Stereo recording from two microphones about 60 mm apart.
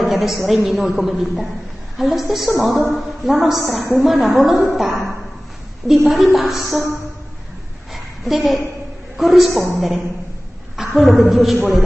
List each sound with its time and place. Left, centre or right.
0.0 s a woman's voice: centre
7.9 s a sound: centre
9.1 s a man's voice: centre